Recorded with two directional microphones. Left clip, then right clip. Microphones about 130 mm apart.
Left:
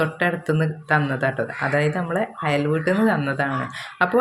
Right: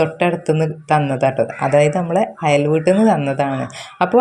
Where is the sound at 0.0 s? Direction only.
30° right (ahead or behind).